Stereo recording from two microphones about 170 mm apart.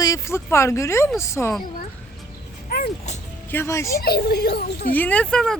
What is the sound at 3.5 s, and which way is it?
Speech, 15° left (ahead or behind).